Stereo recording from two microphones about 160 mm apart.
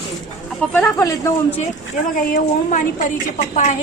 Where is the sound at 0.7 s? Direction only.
15° left (ahead or behind).